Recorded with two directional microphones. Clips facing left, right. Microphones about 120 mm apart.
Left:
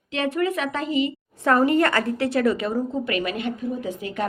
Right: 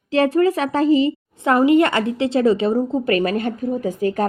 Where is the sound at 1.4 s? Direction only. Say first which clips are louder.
Right 4 dB; 20° right (ahead or behind); by 4.2 s 40° right (ahead or behind).